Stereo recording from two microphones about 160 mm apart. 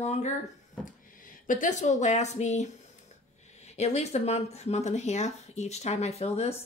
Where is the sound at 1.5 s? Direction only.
55° left (ahead or behind).